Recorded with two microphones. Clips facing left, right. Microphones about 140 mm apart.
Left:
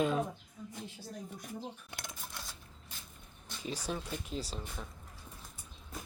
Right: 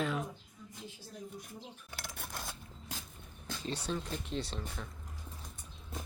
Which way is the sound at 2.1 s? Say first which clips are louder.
Right 3 dB; 65° right (ahead or behind).